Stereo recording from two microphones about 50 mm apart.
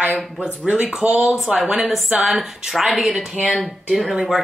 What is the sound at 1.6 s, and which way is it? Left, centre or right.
Speech, centre.